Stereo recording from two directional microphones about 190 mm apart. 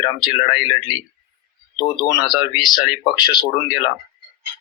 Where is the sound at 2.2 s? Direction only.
25° left (ahead or behind).